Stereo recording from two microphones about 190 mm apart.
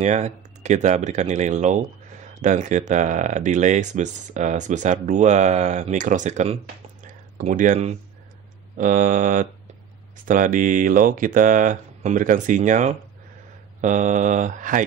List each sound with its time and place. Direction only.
0.0 s speech: 40° right (ahead or behind)
7.1 s a sound: 40° right (ahead or behind)
8.7 s speech: 45° right (ahead or behind)